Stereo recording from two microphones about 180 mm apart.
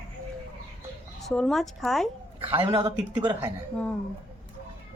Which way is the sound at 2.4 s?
30° right (ahead or behind).